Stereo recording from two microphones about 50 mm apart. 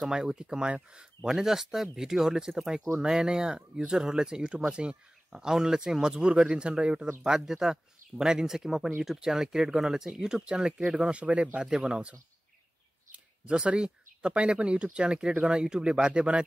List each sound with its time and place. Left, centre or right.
0.0 s speech: centre
7.2 s speech: centre; by 11.6 s right
11.6 s speech: centre
13.1 s speech: right